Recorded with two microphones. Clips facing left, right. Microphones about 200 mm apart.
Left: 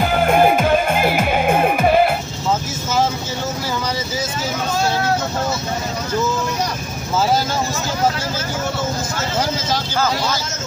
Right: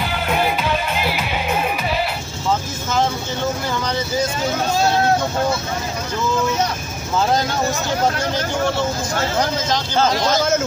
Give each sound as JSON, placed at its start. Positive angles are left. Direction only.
{"t": 0.0, "sound": "music", "side_deg": 50}